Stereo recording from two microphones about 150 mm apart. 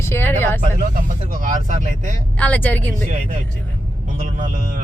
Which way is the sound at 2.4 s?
10° left (ahead or behind).